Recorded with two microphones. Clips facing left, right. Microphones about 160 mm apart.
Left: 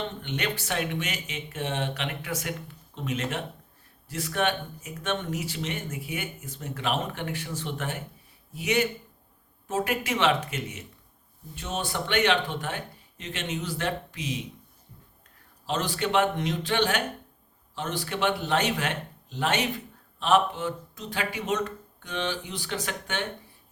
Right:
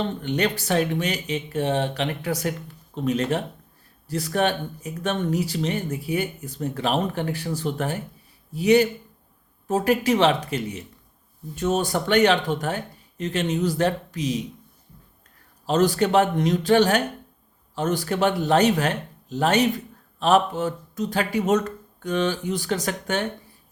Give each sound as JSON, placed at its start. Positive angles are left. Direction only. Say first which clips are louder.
{"t": 0.0, "sound": "speech", "louder": "right 7 dB", "side_deg": -40}
{"t": 15.6, "sound": "speech", "louder": "right 9 dB", "side_deg": -40}